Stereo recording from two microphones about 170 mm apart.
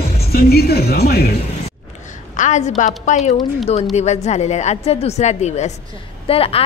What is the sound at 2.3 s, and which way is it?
A woman's voice, 45° left (ahead or behind).